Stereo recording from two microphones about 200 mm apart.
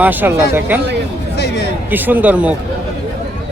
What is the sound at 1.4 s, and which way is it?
Music, 55° left (ahead or behind).